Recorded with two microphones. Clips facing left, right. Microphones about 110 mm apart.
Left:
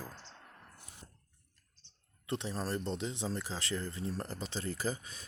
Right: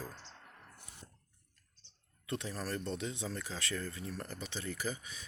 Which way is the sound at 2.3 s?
25° left (ahead or behind).